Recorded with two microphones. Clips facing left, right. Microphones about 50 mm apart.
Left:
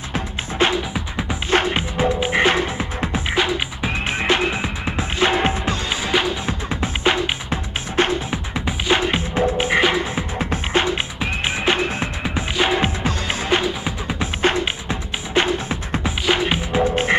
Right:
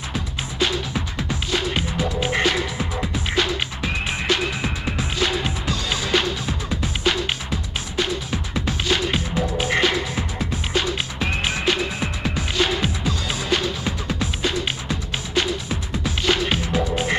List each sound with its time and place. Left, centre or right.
0.1 s music: left
3.3 s music: centre; by 8.1 s left
8.3 s music: centre
9.8 s frog: centre
10.4 s music: left
13.0 s music: left
13.6 s music: centre
14.2 s music: left
16.3 s music: centre
16.8 s croak: left